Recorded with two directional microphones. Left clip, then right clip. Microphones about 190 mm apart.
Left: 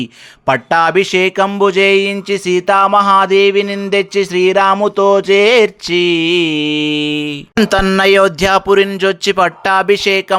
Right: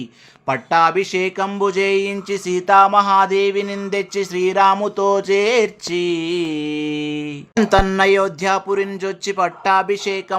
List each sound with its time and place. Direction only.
0.0 s speech: 35° left (ahead or behind)
2.1 s music: 30° left (ahead or behind)
7.8 s speech: 30° left (ahead or behind)
8.9 s music: 30° left (ahead or behind)